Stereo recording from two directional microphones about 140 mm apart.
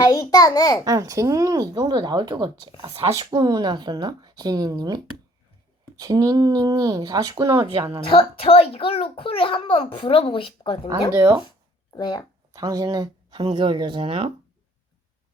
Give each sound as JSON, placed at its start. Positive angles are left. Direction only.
{"t": 0.0, "sound": "a child's voice", "side_deg": 25}
{"t": 0.9, "sound": "speech", "side_deg": -25}
{"t": 6.0, "sound": "speech", "side_deg": -25}
{"t": 8.1, "sound": "a child's voice", "side_deg": 45}
{"t": 11.9, "sound": "a child's voice", "side_deg": 30}
{"t": 12.5, "sound": "speech", "side_deg": -25}